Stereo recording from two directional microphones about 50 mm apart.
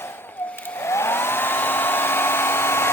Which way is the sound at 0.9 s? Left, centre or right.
Left.